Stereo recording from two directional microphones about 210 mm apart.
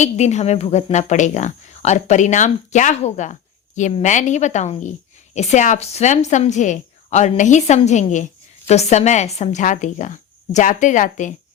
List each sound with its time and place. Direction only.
0.0 s a woman's voice: 35° left (ahead or behind)